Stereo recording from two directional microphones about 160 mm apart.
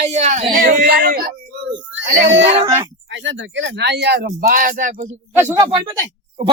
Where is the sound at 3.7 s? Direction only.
90° right.